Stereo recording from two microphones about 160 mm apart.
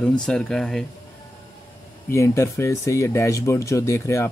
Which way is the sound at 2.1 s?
20° left (ahead or behind).